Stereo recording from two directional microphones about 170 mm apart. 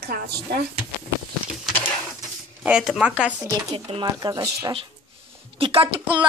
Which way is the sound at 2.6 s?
5° right (ahead or behind).